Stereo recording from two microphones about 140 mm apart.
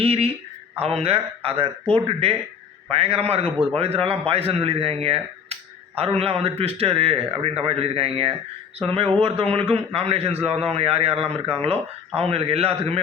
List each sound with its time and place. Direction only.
0.0 s a man's voice: 45° right (ahead or behind)
2.9 s a man's voice: 45° right (ahead or behind)
10.5 s speech: centre (ahead or behind)
10.8 s a man's voice: 45° right (ahead or behind)